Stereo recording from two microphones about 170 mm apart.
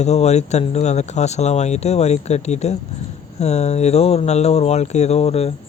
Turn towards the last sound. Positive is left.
turn(degrees=35)  # may be behind; listen again after turning